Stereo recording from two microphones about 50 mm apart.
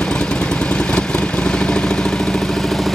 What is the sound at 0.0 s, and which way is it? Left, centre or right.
Vehicle, centre.